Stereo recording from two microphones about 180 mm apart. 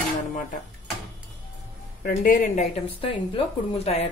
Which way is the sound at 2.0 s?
50° left (ahead or behind).